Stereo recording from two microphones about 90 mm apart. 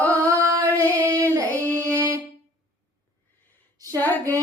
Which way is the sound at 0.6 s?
30° right (ahead or behind).